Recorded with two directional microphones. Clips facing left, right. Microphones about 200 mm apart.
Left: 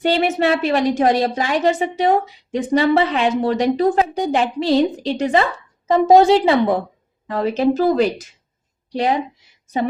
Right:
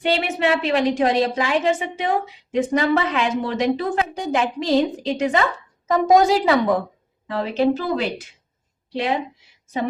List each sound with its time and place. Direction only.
0.0 s a woman's voice: 40° left (ahead or behind)
7.3 s a woman's voice: 40° left (ahead or behind)